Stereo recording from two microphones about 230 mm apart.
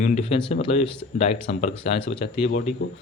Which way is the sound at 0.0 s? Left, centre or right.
Left.